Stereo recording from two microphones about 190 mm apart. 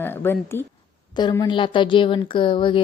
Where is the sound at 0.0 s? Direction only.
10° left (ahead or behind).